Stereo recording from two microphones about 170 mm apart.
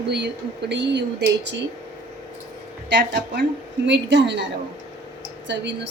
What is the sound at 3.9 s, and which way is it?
Speech, 90° right.